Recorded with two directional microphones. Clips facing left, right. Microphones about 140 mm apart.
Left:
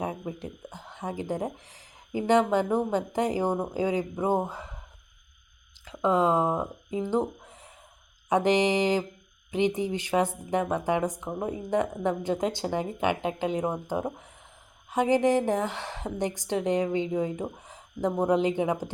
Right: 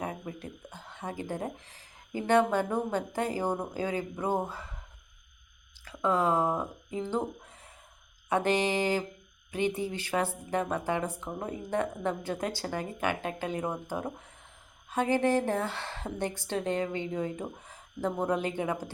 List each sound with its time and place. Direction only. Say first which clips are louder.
0.0 s speech: left 4 dB; 15° left (ahead or behind)
5.8 s speech: left 4 dB; 20° left (ahead or behind)